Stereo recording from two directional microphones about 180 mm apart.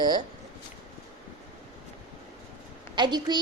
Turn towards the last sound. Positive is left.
turn(degrees=-25)  # may be behind; listen again after turning